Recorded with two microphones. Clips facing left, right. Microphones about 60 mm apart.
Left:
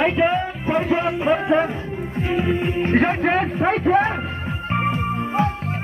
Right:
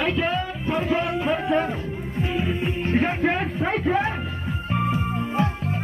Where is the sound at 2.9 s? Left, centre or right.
Left.